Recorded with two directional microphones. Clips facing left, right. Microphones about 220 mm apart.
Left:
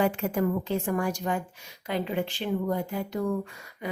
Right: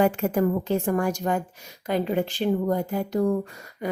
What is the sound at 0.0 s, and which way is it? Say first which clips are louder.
Speech: right 4 dB; 45° right (ahead or behind).